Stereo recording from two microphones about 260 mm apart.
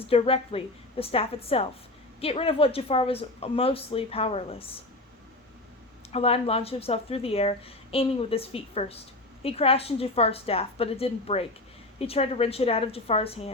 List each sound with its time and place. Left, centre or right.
0.1 s speech: left
6.1 s speech: left